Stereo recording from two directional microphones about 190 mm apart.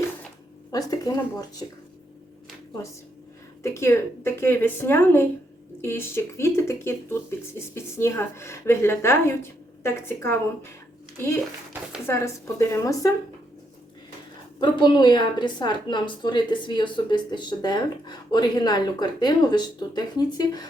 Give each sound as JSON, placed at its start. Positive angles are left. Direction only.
{"t": 0.7, "sound": "a woman's voice", "side_deg": 20}
{"t": 3.6, "sound": "speech", "side_deg": 15}
{"t": 12.0, "sound": "speech", "side_deg": 15}
{"t": 14.6, "sound": "a woman's voice", "side_deg": 25}